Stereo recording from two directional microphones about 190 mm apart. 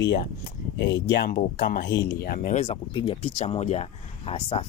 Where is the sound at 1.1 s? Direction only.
50° left (ahead or behind).